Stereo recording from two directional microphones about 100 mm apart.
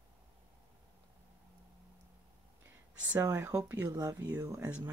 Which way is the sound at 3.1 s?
20° right (ahead or behind).